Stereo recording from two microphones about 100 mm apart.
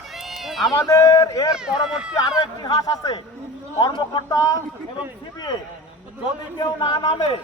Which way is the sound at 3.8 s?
50° left (ahead or behind).